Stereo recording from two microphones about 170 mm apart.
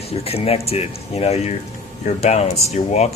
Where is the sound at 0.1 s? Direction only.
35° left (ahead or behind).